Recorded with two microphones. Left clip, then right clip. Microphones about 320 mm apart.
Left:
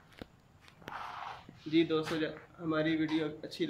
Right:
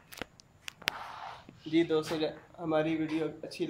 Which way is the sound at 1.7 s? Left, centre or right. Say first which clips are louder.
Right 2 dB; centre.